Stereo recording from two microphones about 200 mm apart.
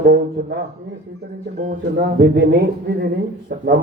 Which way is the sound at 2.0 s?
50° right (ahead or behind).